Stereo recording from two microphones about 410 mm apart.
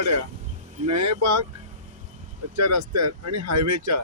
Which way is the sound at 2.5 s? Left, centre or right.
Right.